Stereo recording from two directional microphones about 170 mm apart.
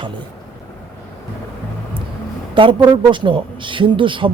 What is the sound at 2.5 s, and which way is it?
Speech, 30° right (ahead or behind).